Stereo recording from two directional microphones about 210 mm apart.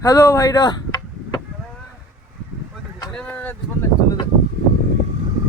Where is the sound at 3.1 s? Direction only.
5° left (ahead or behind).